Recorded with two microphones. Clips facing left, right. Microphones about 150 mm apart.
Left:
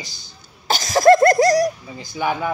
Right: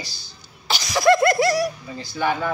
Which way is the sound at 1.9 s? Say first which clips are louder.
Right 4 dB; 15° left (ahead or behind).